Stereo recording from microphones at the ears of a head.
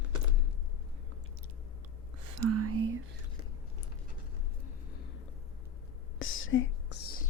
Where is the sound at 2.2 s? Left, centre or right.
Right.